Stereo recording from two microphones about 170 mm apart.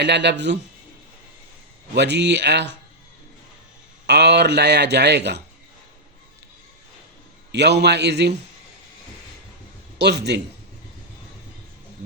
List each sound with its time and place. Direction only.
0.0 s speech: 90° right
2.0 s speech: 90° right
4.0 s speech: 85° right
7.5 s speech: 90° right
10.0 s speech: 85° right